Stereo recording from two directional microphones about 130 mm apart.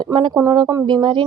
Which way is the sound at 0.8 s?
40° right (ahead or behind).